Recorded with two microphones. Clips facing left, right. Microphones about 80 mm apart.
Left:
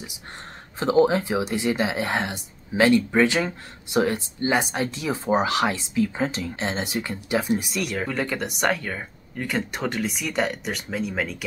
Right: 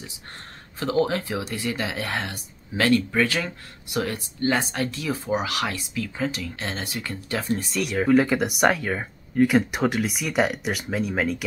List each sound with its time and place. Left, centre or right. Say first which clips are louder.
0.7 s speech: left 4 dB; left; by 11.3 s centre